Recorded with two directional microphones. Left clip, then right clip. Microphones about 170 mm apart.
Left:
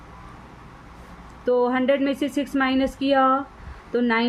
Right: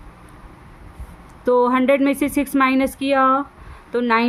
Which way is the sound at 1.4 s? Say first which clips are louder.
Right 4 dB; 50° right (ahead or behind).